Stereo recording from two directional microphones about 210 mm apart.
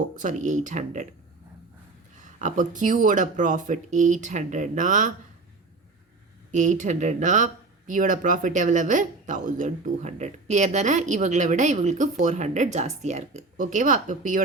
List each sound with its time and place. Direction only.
0.2 s speech: 35° right (ahead or behind)
2.1 s speech: 35° right (ahead or behind)
6.5 s speech: 35° right (ahead or behind)